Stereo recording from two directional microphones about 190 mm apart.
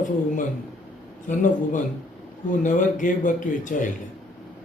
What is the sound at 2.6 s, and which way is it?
A man's voice, 40° left (ahead or behind).